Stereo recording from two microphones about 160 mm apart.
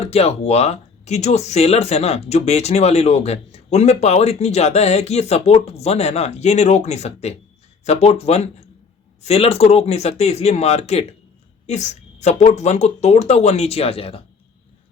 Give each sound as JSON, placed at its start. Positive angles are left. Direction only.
{"t": 0.0, "sound": "speech", "side_deg": 40}